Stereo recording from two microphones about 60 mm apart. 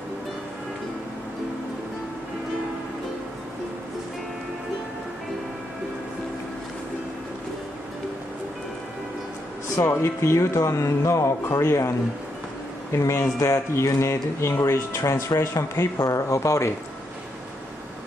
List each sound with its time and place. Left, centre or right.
9.8 s speech: left
12.9 s speech: left